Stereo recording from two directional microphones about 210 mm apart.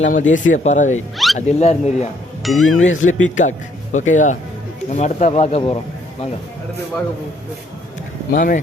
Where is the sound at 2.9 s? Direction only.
70° left (ahead or behind).